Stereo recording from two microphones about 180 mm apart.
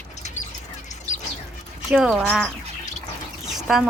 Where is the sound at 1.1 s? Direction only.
40° left (ahead or behind).